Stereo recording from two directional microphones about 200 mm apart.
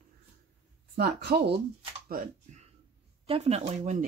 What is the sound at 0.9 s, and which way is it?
Speech, 55° right (ahead or behind).